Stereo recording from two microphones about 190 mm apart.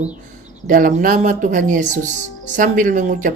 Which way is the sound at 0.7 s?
45° right (ahead or behind).